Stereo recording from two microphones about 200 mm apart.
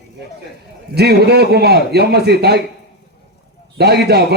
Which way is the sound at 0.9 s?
55° right (ahead or behind).